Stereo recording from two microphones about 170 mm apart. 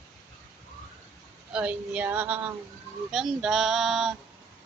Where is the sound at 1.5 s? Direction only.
5° right (ahead or behind).